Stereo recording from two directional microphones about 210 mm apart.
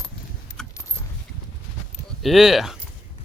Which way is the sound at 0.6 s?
Centre (ahead or behind).